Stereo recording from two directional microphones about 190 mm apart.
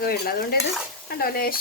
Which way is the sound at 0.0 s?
50° left (ahead or behind).